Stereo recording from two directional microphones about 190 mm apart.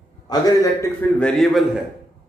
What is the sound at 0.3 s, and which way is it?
A man's voice, 15° left (ahead or behind).